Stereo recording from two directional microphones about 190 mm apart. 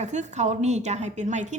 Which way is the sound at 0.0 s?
40° right (ahead or behind).